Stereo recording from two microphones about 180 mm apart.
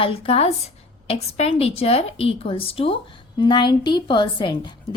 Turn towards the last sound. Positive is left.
turn(degrees=25)  # may be behind; listen again after turning